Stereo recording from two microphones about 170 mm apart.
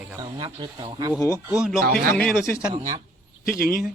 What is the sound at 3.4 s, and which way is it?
Speech, 60° left (ahead or behind).